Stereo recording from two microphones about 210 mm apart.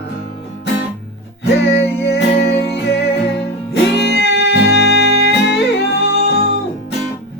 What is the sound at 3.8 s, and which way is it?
Music, 55° left (ahead or behind).